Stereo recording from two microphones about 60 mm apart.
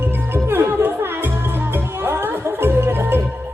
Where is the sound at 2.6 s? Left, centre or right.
Right.